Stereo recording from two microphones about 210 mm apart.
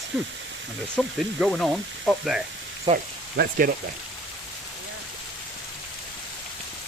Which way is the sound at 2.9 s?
45° right (ahead or behind).